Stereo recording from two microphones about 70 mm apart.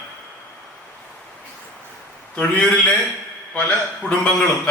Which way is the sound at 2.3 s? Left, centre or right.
Centre.